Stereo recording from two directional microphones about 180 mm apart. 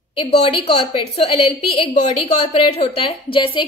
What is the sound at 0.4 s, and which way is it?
A woman's voice, 30° left (ahead or behind).